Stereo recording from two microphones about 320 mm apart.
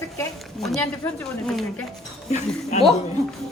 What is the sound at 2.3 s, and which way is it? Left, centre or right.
Speech, left.